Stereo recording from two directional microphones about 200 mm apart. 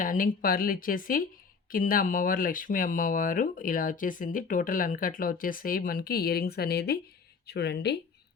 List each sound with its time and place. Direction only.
0.0 s speech: 45° left (ahead or behind)